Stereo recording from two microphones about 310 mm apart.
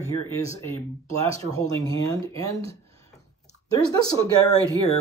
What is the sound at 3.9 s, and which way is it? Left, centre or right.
Speech, centre.